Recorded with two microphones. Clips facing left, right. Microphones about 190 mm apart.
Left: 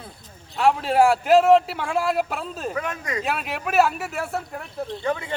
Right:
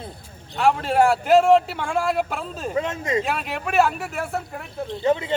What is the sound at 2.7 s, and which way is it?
Speech, 25° right (ahead or behind).